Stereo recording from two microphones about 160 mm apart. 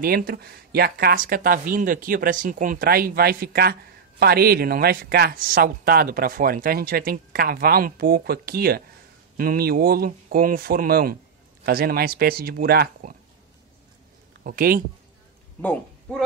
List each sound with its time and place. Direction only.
0.0 s speech: 70° right (ahead or behind)
14.4 s speech: 65° right (ahead or behind)
15.6 s speech: 5° left (ahead or behind)